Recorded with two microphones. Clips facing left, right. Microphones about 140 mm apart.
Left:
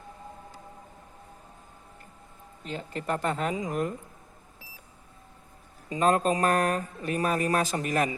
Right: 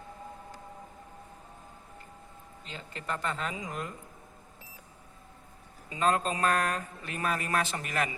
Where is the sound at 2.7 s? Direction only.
45° left (ahead or behind).